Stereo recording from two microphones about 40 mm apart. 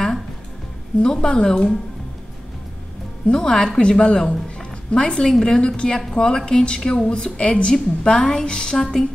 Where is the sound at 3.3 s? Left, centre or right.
Centre.